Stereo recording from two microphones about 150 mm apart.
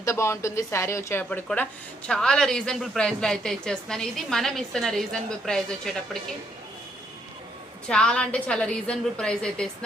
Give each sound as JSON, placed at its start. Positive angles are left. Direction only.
{"t": 0.0, "sound": "a woman's voice", "side_deg": 20}
{"t": 7.9, "sound": "speech", "side_deg": 5}